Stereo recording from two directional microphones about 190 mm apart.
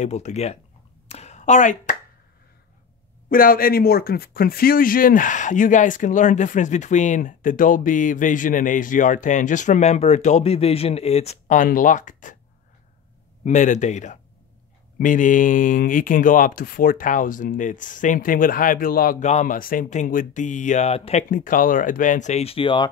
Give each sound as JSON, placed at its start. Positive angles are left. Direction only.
{"t": 0.0, "sound": "speech", "side_deg": 35}
{"t": 1.0, "sound": "a sound", "side_deg": 35}
{"t": 3.3, "sound": "speech", "side_deg": 50}
{"t": 13.4, "sound": "speech", "side_deg": 40}